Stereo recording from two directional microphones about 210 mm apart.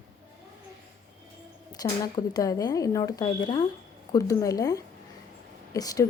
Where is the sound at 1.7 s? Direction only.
20° left (ahead or behind).